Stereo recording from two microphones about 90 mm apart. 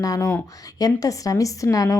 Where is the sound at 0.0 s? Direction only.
40° left (ahead or behind).